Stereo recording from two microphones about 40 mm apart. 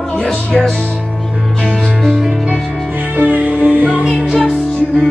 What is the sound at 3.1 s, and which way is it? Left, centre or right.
Music, right.